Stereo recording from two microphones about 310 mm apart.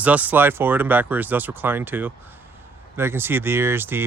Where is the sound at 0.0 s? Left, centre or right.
Centre.